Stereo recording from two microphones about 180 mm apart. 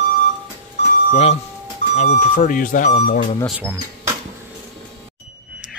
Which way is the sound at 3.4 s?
Centre (ahead or behind).